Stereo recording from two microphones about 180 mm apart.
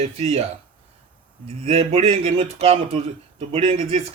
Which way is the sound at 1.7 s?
35° right (ahead or behind).